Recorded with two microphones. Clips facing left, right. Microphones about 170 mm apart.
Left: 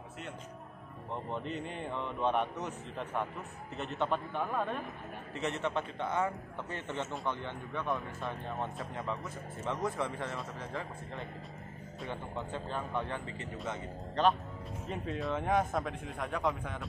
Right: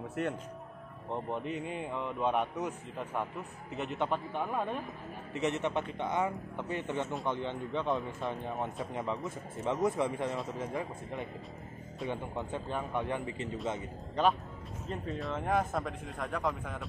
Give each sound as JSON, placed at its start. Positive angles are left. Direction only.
{"t": 0.2, "sound": "speech", "side_deg": -60}
{"t": 1.3, "sound": "a man's voice", "side_deg": -10}